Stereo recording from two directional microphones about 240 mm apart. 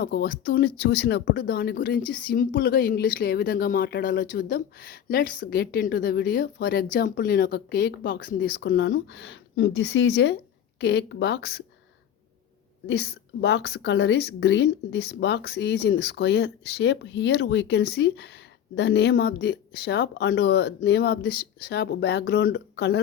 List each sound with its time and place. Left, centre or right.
0.0 s a woman's voice: left
12.9 s a woman's voice: left